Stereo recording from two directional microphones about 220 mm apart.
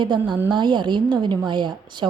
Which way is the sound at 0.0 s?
20° right (ahead or behind).